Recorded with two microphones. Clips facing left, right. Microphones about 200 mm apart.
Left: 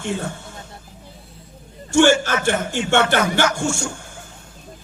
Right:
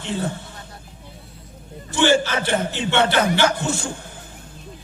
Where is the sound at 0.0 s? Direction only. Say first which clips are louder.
Left 1 dB; 50° left (ahead or behind).